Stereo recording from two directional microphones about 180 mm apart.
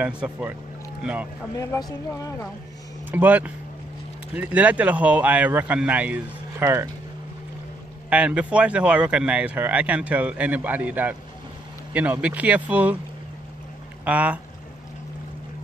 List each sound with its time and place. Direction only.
0.0 s speech: 10° right (ahead or behind)
1.5 s speech: 15° left (ahead or behind)
3.1 s speech: 10° right (ahead or behind)
8.1 s speech: 5° right (ahead or behind)
14.0 s speech: 5° right (ahead or behind)